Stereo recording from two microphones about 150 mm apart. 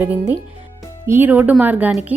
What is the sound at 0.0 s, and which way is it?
A woman's voice, 15° right (ahead or behind).